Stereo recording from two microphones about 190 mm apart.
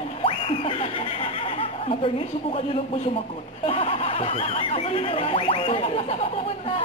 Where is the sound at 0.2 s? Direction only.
30° left (ahead or behind).